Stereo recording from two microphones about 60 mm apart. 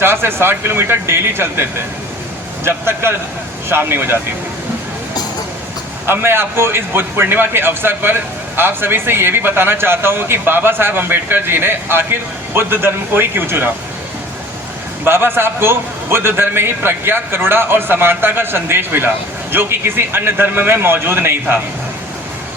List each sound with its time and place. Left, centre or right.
0.0 s a man's voice: right
2.6 s a man's voice: right
6.1 s a man's voice: right
15.0 s a man's voice: right